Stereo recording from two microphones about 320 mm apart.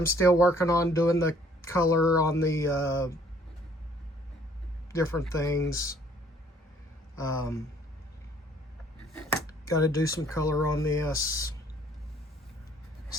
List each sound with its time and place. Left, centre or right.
0.2 s speech: centre
4.9 s speech: centre
7.2 s speech: centre
9.6 s speech: centre